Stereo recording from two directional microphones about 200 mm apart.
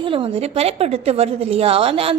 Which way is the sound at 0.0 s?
25° right (ahead or behind).